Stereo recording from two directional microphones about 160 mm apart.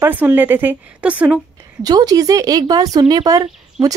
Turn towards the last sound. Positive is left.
turn(degrees=-20)  # may be behind; listen again after turning